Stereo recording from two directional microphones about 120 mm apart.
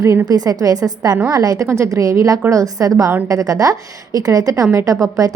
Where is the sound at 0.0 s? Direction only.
25° right (ahead or behind).